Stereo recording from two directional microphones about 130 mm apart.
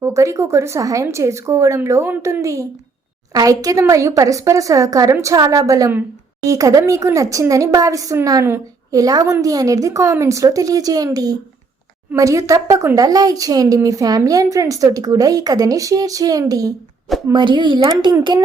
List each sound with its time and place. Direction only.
0.0 s speech: 25° right (ahead or behind)
17.3 s a child's voice: 35° right (ahead or behind)